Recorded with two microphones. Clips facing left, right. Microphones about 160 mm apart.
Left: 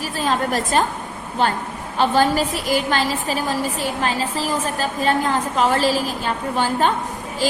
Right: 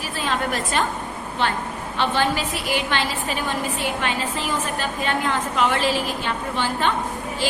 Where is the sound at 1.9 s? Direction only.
40° left (ahead or behind).